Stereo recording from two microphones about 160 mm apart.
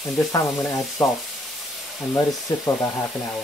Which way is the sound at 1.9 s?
Centre (ahead or behind).